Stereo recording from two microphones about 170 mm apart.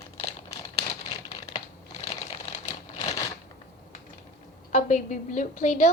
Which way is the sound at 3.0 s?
20° left (ahead or behind).